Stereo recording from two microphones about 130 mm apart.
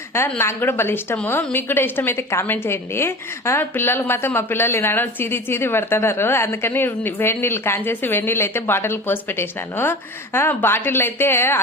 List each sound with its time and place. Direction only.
0.1 s a woman's voice: 20° left (ahead or behind)